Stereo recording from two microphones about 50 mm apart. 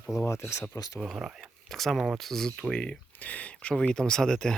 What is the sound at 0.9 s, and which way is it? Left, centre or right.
Speech, centre.